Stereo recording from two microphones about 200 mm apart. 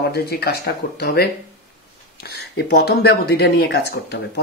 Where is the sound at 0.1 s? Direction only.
55° left (ahead or behind).